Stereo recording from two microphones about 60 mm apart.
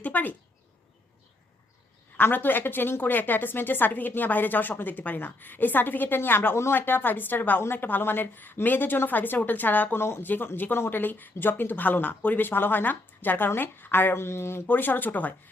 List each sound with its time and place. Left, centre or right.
0.0 s a sound: left
2.1 s a woman's voice: left
10.0 s a woman's voice: left
14.7 s a woman's voice: left